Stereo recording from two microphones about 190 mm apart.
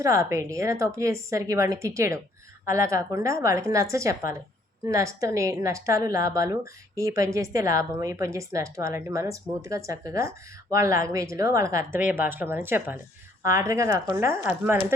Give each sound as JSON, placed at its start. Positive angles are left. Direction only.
{"t": 0.0, "sound": "a woman's voice", "side_deg": -15}